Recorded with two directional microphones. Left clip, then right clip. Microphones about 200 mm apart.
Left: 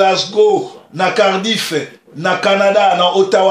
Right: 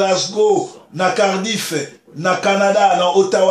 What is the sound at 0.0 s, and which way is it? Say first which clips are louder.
Speech: left 4 dB; 30° left (ahead or behind).